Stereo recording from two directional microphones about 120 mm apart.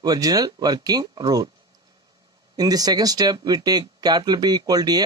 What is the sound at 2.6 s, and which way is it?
Speech, 30° right (ahead or behind).